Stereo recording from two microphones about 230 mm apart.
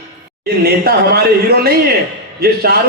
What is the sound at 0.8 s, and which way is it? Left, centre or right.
A man's voice, right.